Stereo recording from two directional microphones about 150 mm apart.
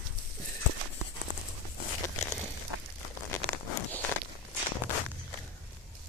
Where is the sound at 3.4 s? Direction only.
10° left (ahead or behind).